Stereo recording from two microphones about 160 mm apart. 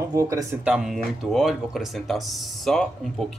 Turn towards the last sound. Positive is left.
turn(degrees=0)  # may be behind; listen again after turning